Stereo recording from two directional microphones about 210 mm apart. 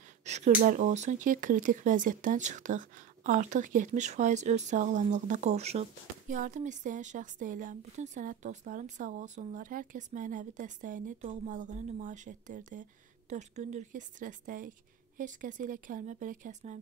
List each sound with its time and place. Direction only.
0.2 s speech: 35° right (ahead or behind)